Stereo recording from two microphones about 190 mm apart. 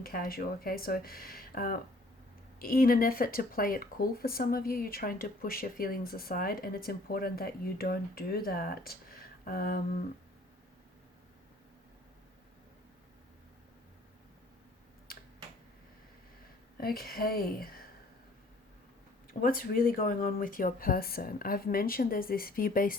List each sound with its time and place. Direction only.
0.0 s speech: 50° left (ahead or behind)
16.7 s speech: 50° left (ahead or behind)
19.3 s speech: 50° left (ahead or behind)